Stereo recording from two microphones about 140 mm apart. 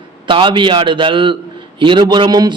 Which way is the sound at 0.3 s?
35° right (ahead or behind).